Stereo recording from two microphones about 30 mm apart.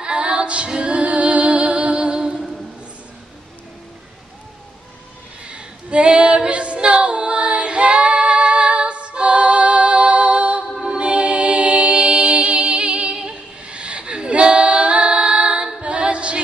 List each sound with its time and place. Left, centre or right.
0.0 s female singing: right
0.7 s music: right
5.4 s a sound: right
6.4 s female singing: right
10.9 s music: right